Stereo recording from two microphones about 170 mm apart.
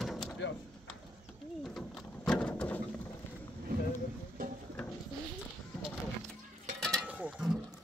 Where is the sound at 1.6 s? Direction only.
Centre (ahead or behind).